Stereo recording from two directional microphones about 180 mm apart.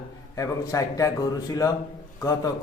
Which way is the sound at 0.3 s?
20° left (ahead or behind).